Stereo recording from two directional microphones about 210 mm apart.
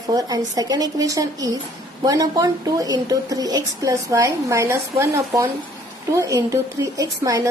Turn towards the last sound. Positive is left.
turn(degrees=-15)  # may be behind; listen again after turning